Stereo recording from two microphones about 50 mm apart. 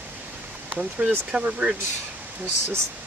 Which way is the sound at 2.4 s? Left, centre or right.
Right.